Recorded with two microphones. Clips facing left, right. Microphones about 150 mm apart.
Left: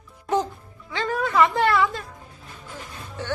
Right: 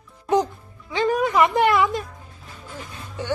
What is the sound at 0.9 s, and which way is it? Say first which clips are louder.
Music: right 5 dB; 15° right (ahead or behind).